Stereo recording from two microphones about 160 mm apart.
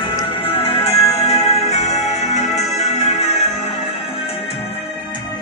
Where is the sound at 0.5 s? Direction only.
35° left (ahead or behind).